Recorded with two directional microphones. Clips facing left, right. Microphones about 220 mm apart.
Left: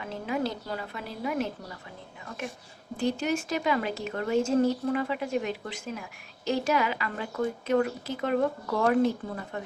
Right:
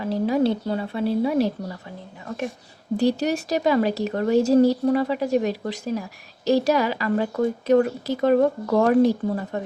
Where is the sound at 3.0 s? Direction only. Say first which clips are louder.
Right 6 dB; 40° right (ahead or behind).